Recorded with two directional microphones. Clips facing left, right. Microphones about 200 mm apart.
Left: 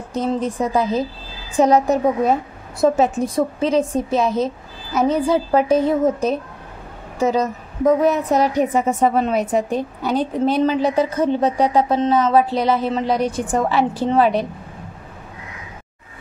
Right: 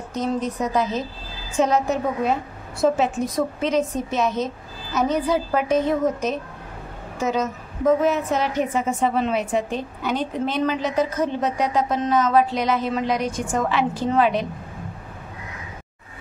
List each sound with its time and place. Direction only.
0.1 s a woman's voice: 30° left (ahead or behind)